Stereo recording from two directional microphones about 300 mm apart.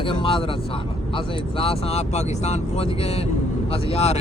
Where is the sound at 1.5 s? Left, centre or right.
Centre.